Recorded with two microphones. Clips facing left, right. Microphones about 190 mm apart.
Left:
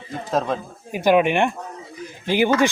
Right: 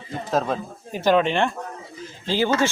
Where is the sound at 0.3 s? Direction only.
Centre (ahead or behind).